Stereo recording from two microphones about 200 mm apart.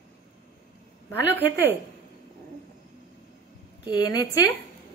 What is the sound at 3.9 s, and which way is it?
Speech, 20° left (ahead or behind).